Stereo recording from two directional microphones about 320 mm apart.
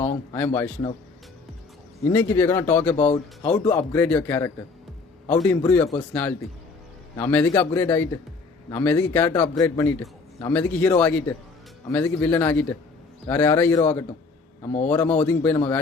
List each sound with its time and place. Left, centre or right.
0.0 s a man's voice: centre
2.0 s a man's voice: centre
2.9 s a man's voice: centre